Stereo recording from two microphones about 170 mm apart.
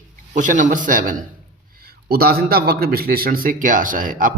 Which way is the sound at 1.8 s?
65° right (ahead or behind).